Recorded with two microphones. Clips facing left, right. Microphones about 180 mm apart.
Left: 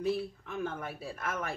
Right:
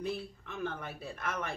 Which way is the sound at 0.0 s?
5° left (ahead or behind).